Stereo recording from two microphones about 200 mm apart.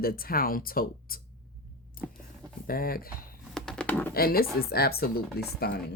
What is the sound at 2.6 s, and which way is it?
Speech, 45° left (ahead or behind).